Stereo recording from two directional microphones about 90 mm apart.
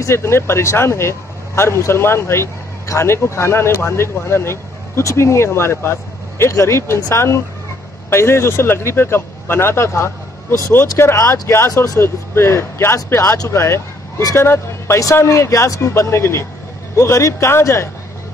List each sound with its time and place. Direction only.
0.0 s speech: 30° left (ahead or behind)